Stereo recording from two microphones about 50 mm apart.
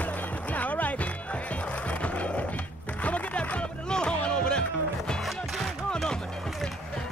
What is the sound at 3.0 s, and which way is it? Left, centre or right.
Music, left.